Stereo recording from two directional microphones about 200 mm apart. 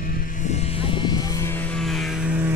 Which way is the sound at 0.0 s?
45° left (ahead or behind).